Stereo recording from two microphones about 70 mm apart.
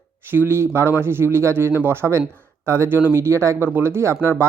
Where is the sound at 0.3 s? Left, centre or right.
Right.